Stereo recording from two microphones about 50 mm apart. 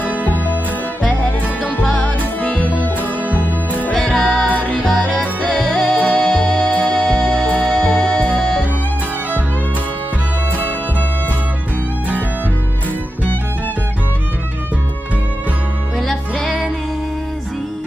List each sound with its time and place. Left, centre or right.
0.0 s music: right
1.9 s music: left
3.0 s music: right
4.0 s music: centre
4.5 s music: left